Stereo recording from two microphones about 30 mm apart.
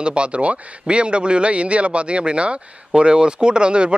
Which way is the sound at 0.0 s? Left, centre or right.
Right.